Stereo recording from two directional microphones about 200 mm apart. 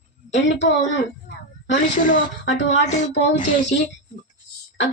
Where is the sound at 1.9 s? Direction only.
40° left (ahead or behind).